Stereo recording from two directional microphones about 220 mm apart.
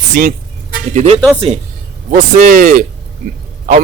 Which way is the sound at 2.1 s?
35° right (ahead or behind).